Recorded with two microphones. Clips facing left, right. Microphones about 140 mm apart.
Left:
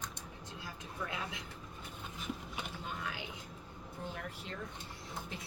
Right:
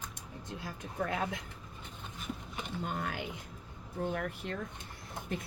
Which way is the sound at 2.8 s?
50° right (ahead or behind).